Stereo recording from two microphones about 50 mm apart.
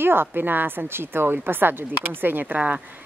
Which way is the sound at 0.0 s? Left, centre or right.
Right.